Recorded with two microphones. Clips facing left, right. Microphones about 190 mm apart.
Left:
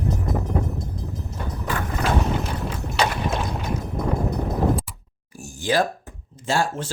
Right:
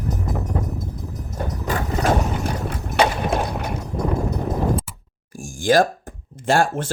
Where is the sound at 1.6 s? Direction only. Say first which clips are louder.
Right 4 dB; 40° right (ahead or behind).